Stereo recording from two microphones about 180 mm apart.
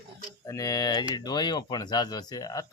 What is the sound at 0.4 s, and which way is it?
Speech, 20° left (ahead or behind).